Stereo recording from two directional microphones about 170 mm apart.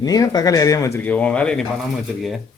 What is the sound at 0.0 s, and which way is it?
Speech, 20° left (ahead or behind).